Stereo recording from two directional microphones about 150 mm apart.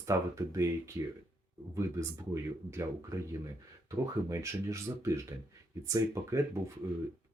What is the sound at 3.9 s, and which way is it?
Speech, 20° right (ahead or behind).